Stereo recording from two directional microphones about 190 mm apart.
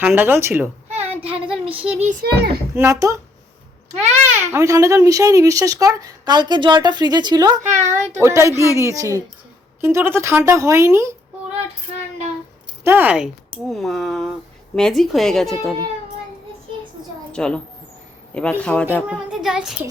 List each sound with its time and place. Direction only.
0.0 s speech: 10° right (ahead or behind)
0.9 s child singing: 30° right (ahead or behind)
2.2 s a child's voice: 55° right (ahead or behind)
2.7 s speech: 15° right (ahead or behind)
3.9 s speech: 35° right (ahead or behind)
4.5 s speech: 15° right (ahead or behind)
7.7 s speech: 40° right (ahead or behind)
8.2 s speech: 15° right (ahead or behind)
12.8 s speech: 10° right (ahead or behind)
17.3 s a woman's voice: 5° left (ahead or behind)
19.1 s speech: centre (ahead or behind)